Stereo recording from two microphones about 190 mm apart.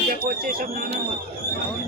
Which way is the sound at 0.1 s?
50° right (ahead or behind).